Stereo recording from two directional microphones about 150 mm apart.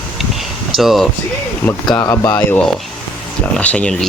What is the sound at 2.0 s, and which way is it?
Speech, 25° left (ahead or behind).